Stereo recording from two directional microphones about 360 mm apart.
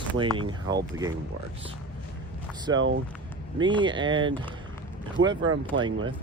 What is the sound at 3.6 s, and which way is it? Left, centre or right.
Speech, centre.